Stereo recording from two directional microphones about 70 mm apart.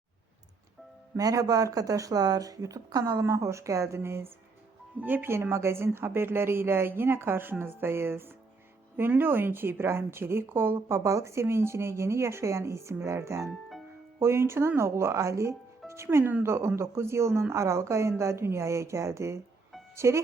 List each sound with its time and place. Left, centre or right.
1.1 s speech: right
4.9 s a woman's voice: right
13.5 s music: centre
14.2 s a woman's voice: right
16.0 s a woman's voice: right